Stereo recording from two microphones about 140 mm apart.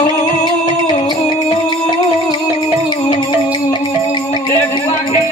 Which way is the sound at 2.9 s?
30° left (ahead or behind).